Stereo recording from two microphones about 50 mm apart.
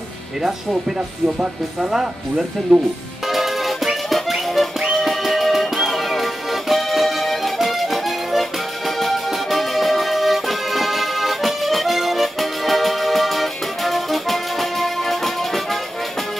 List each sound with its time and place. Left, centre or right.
0.4 s speech: centre
3.3 s music: centre